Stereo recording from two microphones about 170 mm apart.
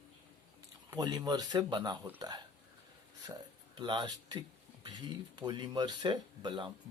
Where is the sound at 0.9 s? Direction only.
25° right (ahead or behind).